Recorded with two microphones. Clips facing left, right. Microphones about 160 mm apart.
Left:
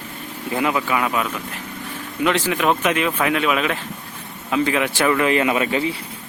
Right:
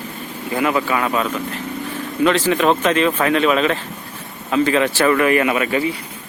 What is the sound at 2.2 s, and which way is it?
Speech, 10° left (ahead or behind).